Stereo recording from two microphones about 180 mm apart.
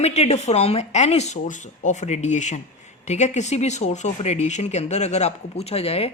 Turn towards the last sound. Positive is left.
turn(degrees=35)  # may be behind; listen again after turning